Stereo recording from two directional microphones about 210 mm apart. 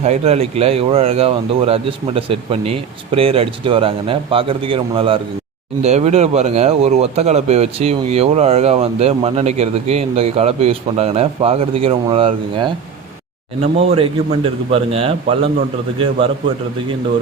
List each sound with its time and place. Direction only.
0.0 s speech: 30° right (ahead or behind)